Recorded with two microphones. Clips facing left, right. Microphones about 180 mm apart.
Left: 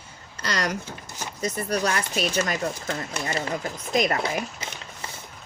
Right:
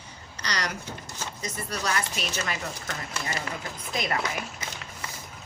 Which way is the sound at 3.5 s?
40° left (ahead or behind).